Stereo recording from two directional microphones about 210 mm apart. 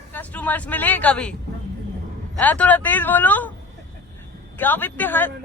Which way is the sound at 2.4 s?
5° left (ahead or behind).